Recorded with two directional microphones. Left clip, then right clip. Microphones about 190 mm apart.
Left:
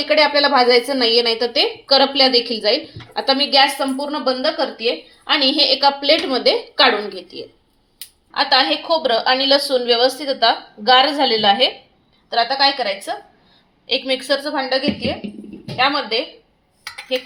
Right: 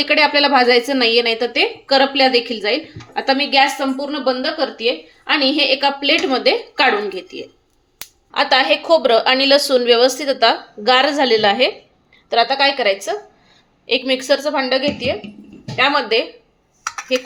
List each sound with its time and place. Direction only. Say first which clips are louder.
0.0 s a woman's voice: right 1 dB; 25° right (ahead or behind)
8.3 s a woman's voice: right 1 dB; 45° right (ahead or behind); by 11.7 s 25° right (ahead or behind)
12.3 s a woman's voice: right 2 dB; 45° right (ahead or behind)
15.8 s a woman's voice: right 3 dB; 40° right (ahead or behind)